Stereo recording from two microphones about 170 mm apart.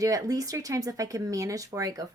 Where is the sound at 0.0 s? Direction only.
20° right (ahead or behind).